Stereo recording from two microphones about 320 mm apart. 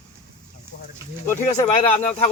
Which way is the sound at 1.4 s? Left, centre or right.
Left.